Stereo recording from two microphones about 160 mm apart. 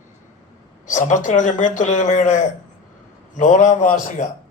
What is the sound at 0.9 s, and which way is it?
Speech, 50° left (ahead or behind).